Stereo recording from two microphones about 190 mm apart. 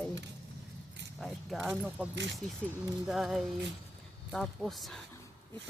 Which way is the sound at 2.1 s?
70° right (ahead or behind).